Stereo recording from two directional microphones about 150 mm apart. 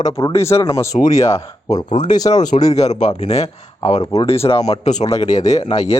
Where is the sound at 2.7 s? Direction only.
45° left (ahead or behind).